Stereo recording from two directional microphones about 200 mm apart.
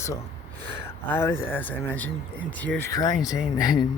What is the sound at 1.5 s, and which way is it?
Speech, 10° left (ahead or behind).